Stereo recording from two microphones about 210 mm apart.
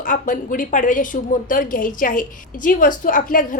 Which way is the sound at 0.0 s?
40° left (ahead or behind).